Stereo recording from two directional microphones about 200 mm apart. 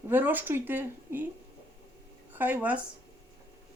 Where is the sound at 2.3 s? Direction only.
10° right (ahead or behind).